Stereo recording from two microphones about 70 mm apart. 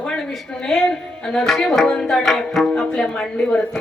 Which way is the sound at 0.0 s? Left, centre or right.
Centre.